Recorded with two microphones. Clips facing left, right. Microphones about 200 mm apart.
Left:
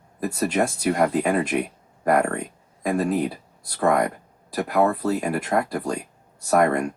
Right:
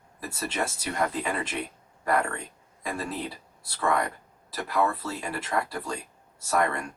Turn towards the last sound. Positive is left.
turn(degrees=40)  # may be behind; listen again after turning